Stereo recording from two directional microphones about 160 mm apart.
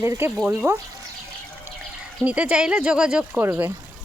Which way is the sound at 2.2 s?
10° right (ahead or behind).